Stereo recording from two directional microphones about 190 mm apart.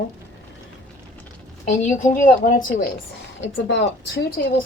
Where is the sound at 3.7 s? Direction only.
65° left (ahead or behind).